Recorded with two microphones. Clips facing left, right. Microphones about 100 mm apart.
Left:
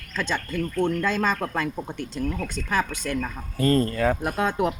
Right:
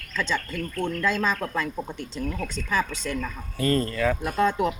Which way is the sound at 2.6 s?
55° left (ahead or behind).